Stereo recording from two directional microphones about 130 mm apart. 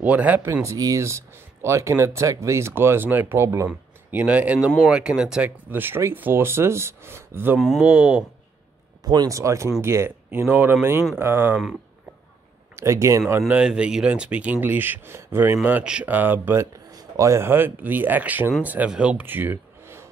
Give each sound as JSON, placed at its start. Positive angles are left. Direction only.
{"t": 0.0, "sound": "speech", "side_deg": -10}
{"t": 9.0, "sound": "speech", "side_deg": -30}
{"t": 12.7, "sound": "speech", "side_deg": -20}
{"t": 13.5, "sound": "speech", "side_deg": -10}